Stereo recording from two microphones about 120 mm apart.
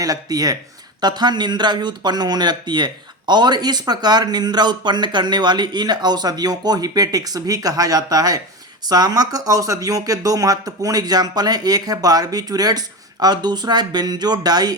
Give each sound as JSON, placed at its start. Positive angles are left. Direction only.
{"t": 0.0, "sound": "speech", "side_deg": -30}